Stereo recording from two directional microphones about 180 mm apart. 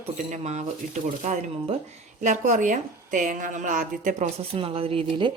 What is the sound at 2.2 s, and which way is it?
A woman's voice, 45° right (ahead or behind).